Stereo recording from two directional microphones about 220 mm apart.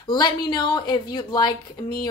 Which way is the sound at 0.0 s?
20° left (ahead or behind).